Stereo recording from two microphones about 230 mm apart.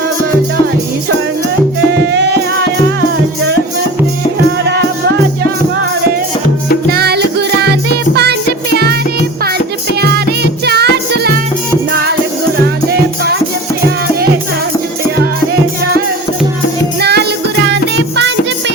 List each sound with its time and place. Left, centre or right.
2.1 s music: right
6.9 s music: right
10.7 s music: right
17.0 s music: right